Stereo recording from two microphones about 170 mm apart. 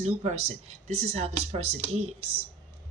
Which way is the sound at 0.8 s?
40° right (ahead or behind).